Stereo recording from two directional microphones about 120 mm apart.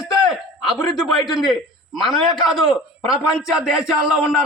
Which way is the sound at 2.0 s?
Centre (ahead or behind).